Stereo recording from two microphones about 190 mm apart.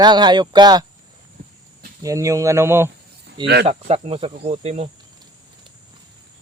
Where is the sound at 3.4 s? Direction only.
55° right (ahead or behind).